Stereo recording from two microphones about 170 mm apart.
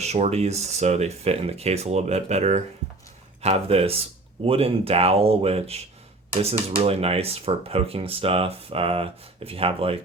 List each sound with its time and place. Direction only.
0.0 s speech: 40° right (ahead or behind)